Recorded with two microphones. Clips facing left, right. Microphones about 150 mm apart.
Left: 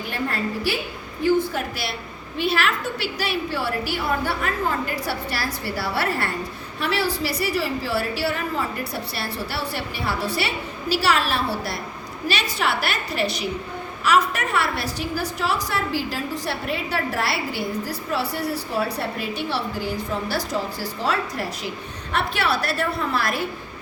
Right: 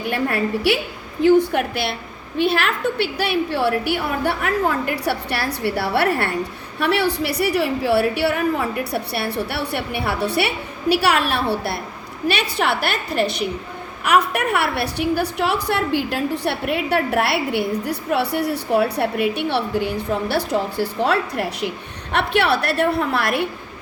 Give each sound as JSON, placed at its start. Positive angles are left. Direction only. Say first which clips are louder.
{"t": 0.1, "sound": "a woman's voice", "louder": "right 6 dB", "side_deg": -65}